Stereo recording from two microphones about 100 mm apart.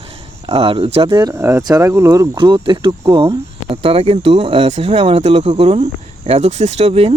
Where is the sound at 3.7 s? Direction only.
70° right (ahead or behind).